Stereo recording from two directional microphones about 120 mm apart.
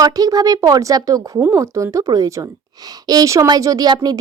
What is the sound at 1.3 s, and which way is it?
Speech, 15° right (ahead or behind).